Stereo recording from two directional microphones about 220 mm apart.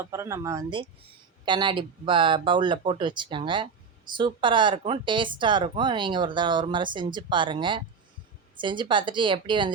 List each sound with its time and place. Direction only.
0.0 s speech: 10° right (ahead or behind)